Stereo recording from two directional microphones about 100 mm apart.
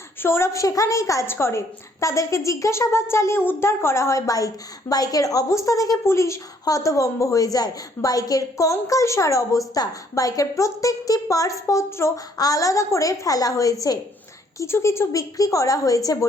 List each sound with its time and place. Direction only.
0.2 s a woman's voice: 25° left (ahead or behind)